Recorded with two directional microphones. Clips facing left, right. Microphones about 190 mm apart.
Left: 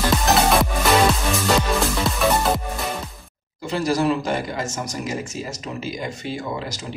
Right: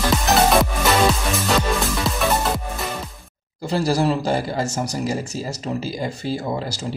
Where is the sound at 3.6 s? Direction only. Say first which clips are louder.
Right 1 dB; 35° right (ahead or behind).